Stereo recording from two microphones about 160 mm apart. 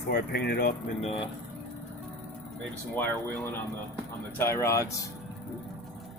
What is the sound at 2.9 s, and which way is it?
Speech, 10° left (ahead or behind).